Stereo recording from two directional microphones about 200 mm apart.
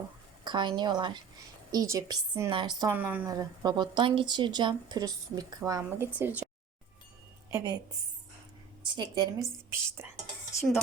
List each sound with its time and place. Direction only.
0.4 s a woman's voice: 20° right (ahead or behind)
2.9 s a woman's voice: 10° right (ahead or behind)
7.5 s a woman's voice: 20° right (ahead or behind)
9.0 s a woman's voice: 20° right (ahead or behind)